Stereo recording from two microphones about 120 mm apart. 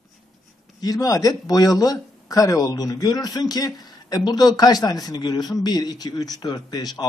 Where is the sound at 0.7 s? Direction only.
30° left (ahead or behind).